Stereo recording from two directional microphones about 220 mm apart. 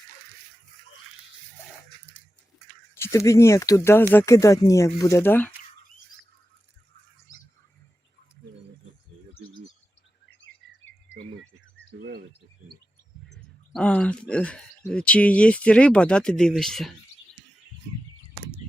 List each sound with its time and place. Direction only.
2.9 s speech: 10° left (ahead or behind)
7.3 s squawk: 35° left (ahead or behind)
11.1 s a sound: 60° left (ahead or behind)
11.9 s bird: 45° right (ahead or behind)
13.7 s speech: 5° left (ahead or behind)